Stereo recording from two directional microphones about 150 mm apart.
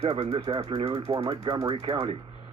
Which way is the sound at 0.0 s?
45° right (ahead or behind).